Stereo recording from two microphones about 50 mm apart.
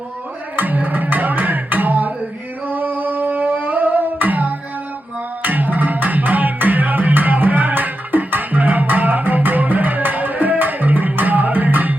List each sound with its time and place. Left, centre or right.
0.5 s music: right
2.6 s humming: right
5.4 s music: right